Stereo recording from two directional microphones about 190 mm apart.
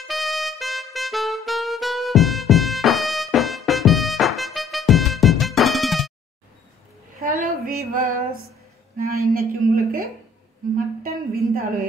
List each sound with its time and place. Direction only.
0.0 s music: centre (ahead or behind)
7.2 s female singing: 50° right (ahead or behind)
8.9 s a man's voice: 50° right (ahead or behind)
11.0 s a sound: 50° right (ahead or behind)